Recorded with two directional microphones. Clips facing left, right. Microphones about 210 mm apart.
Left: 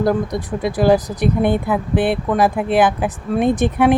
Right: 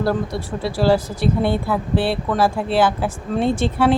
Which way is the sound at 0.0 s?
15° left (ahead or behind).